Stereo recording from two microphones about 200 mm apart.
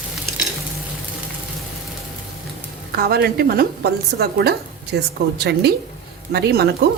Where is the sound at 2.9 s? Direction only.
50° right (ahead or behind).